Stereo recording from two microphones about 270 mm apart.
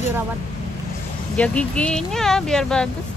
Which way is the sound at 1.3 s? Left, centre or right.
Centre.